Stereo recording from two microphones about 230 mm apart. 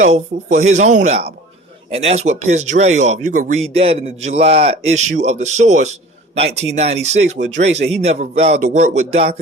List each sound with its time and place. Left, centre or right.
0.0 s speech: right